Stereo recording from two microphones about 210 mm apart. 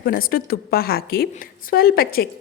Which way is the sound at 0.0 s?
45° left (ahead or behind).